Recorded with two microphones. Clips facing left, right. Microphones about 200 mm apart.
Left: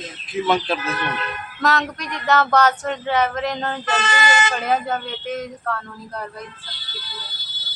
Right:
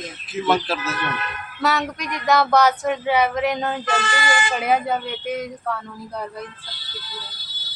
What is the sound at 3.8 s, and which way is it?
Speech, 20° left (ahead or behind).